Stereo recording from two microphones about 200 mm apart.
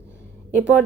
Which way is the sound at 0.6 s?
5° right (ahead or behind).